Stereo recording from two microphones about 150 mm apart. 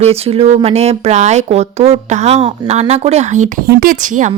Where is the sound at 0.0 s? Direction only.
40° right (ahead or behind).